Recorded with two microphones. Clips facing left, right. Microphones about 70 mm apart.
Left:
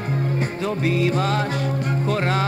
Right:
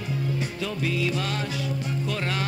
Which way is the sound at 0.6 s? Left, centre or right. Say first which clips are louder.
Left 7 dB; left.